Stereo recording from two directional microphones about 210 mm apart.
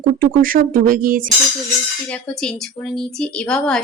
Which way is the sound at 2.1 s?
5° left (ahead or behind).